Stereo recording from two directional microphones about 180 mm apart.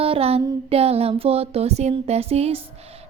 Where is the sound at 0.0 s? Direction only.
35° right (ahead or behind).